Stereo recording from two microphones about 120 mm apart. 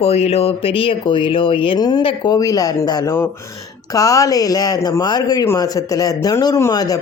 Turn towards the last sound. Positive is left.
turn(degrees=30)  # may be behind; listen again after turning